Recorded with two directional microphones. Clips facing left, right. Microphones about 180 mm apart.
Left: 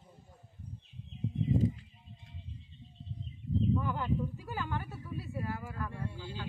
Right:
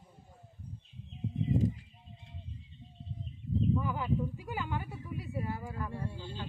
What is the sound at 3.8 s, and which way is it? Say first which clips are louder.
Speech: right 1 dB; 5° right (ahead or behind).